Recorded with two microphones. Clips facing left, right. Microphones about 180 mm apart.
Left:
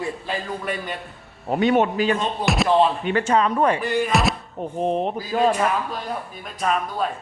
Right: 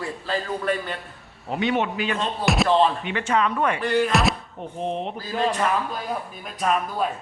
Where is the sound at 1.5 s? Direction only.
45° left (ahead or behind).